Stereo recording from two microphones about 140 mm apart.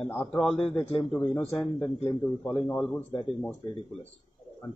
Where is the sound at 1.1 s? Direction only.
10° left (ahead or behind).